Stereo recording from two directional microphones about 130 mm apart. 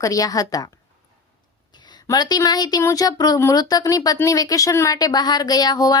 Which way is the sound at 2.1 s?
30° left (ahead or behind).